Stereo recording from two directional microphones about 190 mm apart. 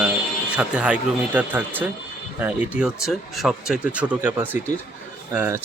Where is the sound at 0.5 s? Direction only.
5° right (ahead or behind).